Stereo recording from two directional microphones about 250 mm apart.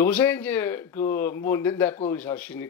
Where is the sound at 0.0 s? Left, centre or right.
Centre.